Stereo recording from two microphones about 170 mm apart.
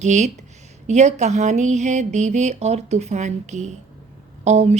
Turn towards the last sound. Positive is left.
turn(degrees=-40)  # may be behind; listen again after turning